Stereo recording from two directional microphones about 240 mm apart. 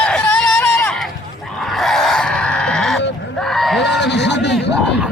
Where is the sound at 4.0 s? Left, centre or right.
Left.